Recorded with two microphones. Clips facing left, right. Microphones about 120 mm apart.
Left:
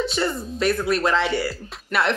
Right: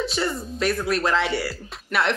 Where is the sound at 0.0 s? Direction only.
Centre (ahead or behind).